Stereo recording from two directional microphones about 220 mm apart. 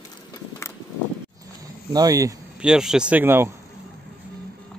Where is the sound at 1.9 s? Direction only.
15° right (ahead or behind).